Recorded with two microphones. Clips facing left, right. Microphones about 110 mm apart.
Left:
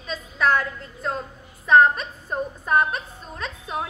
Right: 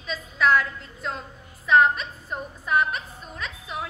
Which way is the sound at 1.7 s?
35° left (ahead or behind).